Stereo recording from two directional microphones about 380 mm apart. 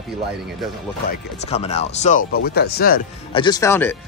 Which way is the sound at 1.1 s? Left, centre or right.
Centre.